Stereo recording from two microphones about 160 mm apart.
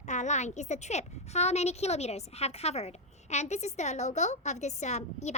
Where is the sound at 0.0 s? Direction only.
50° left (ahead or behind).